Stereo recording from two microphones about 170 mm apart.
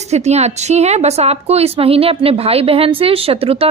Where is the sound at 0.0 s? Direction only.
40° right (ahead or behind).